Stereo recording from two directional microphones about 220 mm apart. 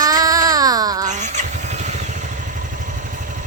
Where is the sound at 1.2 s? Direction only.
35° right (ahead or behind).